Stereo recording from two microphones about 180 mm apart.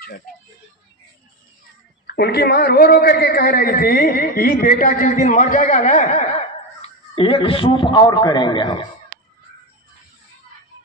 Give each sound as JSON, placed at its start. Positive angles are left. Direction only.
{"t": 2.0, "sound": "a man's voice", "side_deg": 65}
{"t": 7.2, "sound": "a man's voice", "side_deg": 30}